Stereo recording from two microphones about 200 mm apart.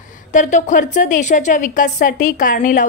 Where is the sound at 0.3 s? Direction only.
40° left (ahead or behind).